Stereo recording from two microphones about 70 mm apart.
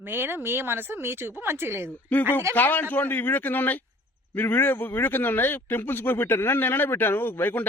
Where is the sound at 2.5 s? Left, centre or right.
Left.